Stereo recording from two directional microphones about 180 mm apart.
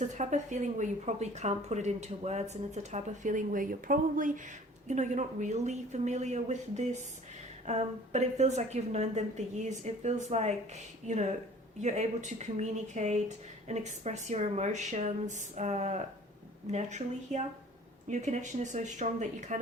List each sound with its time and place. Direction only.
0.0 s a woman's voice: 40° right (ahead or behind)